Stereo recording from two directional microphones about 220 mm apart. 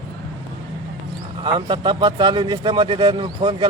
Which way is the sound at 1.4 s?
20° right (ahead or behind).